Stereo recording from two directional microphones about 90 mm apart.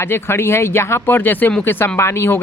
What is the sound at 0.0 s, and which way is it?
Speech, 25° left (ahead or behind).